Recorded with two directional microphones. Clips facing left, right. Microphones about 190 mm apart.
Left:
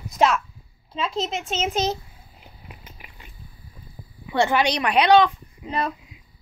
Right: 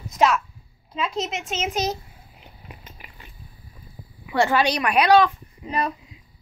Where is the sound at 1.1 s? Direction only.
30° left (ahead or behind).